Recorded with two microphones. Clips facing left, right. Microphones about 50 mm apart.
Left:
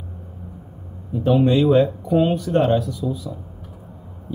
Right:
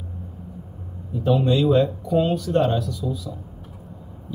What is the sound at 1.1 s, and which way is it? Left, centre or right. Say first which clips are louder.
Speech: left 2 dB; centre.